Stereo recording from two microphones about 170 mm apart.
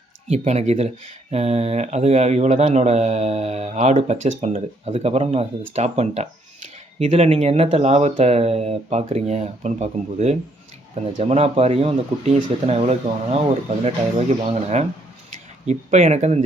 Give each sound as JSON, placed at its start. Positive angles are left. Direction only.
{"t": 0.3, "sound": "speech", "side_deg": -40}